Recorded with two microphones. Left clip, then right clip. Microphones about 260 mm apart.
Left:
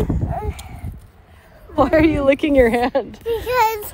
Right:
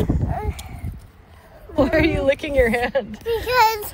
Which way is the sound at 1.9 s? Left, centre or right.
Left.